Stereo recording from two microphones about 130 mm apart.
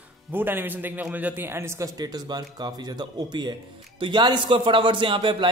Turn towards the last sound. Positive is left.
turn(degrees=-40)  # may be behind; listen again after turning